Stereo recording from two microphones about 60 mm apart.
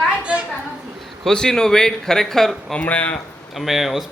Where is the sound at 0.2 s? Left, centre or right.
Centre.